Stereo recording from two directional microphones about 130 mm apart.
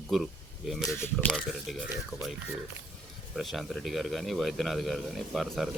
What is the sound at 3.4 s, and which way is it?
Speech, centre (ahead or behind).